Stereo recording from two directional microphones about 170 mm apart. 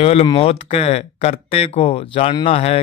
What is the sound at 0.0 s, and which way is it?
A man's voice, 35° left (ahead or behind).